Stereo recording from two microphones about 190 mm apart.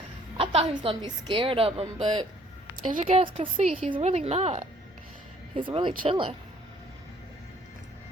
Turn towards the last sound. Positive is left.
turn(degrees=-25)  # may be behind; listen again after turning